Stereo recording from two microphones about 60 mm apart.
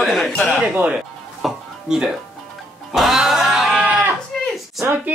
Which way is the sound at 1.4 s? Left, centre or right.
Centre.